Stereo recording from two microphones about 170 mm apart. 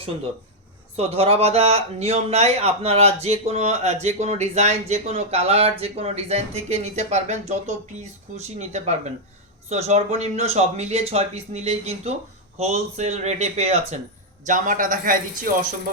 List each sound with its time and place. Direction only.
0.9 s speech: 35° right (ahead or behind)
14.4 s a man's voice: 50° right (ahead or behind)